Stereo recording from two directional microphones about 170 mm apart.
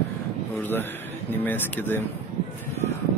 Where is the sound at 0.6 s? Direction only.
10° left (ahead or behind).